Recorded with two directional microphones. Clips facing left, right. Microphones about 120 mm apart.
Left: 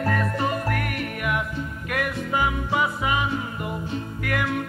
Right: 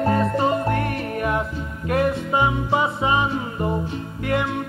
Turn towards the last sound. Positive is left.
turn(degrees=-25)  # may be behind; listen again after turning